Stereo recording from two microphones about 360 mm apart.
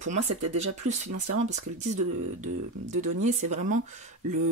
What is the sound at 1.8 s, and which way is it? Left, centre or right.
Speech, centre.